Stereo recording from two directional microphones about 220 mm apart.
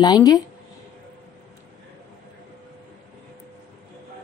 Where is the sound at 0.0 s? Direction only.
15° left (ahead or behind).